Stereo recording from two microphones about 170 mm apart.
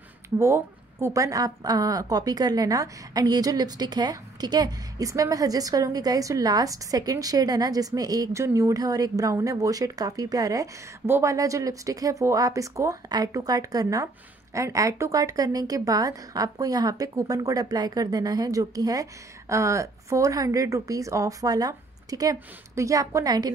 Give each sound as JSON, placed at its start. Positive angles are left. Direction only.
{"t": 0.4, "sound": "a woman's voice", "side_deg": -15}